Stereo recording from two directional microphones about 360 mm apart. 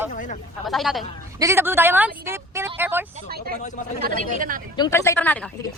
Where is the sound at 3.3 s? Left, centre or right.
Right.